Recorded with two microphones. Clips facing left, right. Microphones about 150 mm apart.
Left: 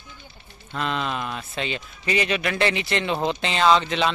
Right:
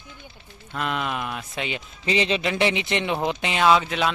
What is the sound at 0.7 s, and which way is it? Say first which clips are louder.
A man's voice: even; 10° right (ahead or behind).